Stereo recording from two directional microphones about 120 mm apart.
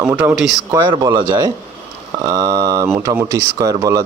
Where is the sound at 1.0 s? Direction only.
35° right (ahead or behind).